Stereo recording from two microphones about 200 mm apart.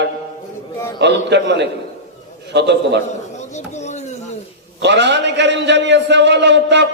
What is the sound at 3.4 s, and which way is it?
Chopping, 35° left (ahead or behind).